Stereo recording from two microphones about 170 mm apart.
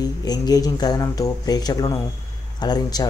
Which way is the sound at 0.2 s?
20° left (ahead or behind).